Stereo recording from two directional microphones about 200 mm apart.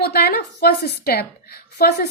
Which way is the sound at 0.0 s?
50° left (ahead or behind).